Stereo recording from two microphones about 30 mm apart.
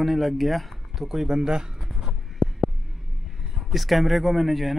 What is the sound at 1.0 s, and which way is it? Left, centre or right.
Speech, centre.